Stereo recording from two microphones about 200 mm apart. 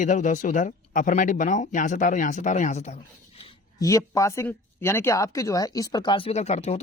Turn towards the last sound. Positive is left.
turn(degrees=30)  # may be behind; listen again after turning